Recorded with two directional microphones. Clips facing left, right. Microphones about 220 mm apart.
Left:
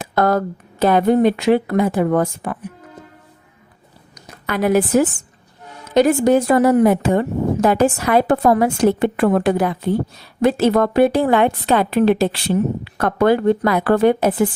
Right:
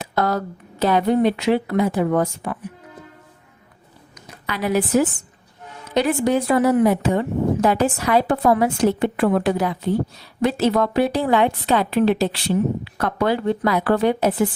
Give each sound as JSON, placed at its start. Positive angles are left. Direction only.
{"t": 0.0, "sound": "a woman's voice", "side_deg": 50}
{"t": 4.1, "sound": "a sound", "side_deg": 50}
{"t": 5.9, "sound": "a woman's voice", "side_deg": 45}